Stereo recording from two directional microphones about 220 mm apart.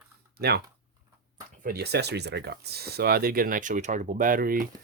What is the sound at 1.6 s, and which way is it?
Speech, 45° right (ahead or behind).